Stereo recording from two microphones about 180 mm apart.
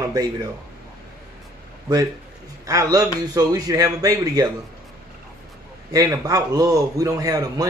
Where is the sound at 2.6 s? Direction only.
20° right (ahead or behind).